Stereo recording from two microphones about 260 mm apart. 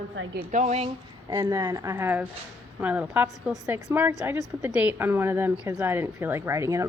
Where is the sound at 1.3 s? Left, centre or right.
Centre.